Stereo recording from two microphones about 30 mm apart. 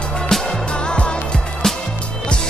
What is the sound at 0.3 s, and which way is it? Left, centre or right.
Music, centre.